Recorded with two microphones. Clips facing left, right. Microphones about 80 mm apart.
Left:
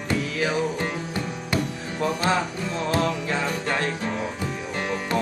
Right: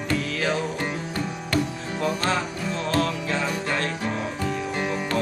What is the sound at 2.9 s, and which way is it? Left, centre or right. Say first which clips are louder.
Music: even; centre.